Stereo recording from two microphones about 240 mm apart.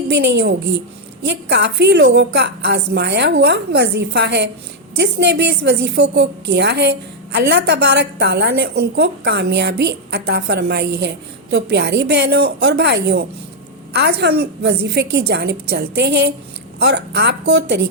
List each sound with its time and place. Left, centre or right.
0.1 s a woman's voice: right